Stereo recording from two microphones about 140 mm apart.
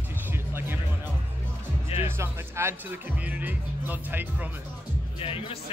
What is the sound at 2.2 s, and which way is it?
Speech, 20° right (ahead or behind).